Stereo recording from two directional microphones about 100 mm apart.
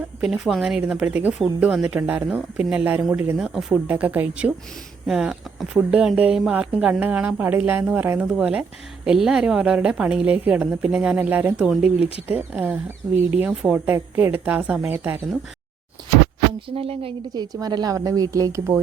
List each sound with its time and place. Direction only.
0.2 s a woman's voice: 5° right (ahead or behind)
3.3 s speech: 5° right (ahead or behind)
3.8 s a woman's voice: 15° right (ahead or behind)
11.7 s speech: 5° right (ahead or behind)
12.3 s a woman's voice: 15° right (ahead or behind)
13.5 s speech: 5° right (ahead or behind)
13.7 s a woman's voice: 20° right (ahead or behind)
16.6 s speech: 70° right (ahead or behind)
17.3 s a woman's voice: 40° right (ahead or behind)